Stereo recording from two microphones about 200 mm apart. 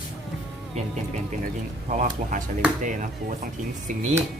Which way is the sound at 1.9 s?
40° right (ahead or behind).